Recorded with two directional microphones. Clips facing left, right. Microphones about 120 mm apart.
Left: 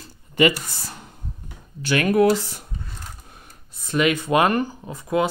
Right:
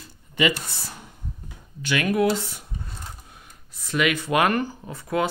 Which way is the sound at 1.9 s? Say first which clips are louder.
Left 4 dB; 45° left (ahead or behind).